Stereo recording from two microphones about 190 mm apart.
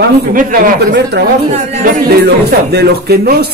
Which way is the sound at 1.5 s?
35° right (ahead or behind).